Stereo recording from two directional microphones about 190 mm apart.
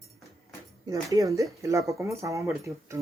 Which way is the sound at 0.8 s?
15° right (ahead or behind).